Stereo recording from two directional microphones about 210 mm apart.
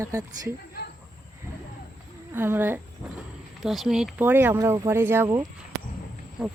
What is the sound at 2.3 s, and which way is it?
Speech, 10° right (ahead or behind).